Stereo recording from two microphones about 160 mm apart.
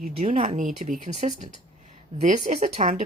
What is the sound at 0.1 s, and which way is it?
Speech, 35° right (ahead or behind).